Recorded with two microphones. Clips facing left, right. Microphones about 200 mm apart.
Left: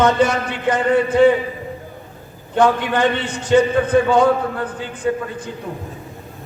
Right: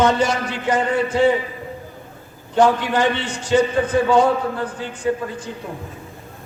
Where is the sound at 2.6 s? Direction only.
55° left (ahead or behind).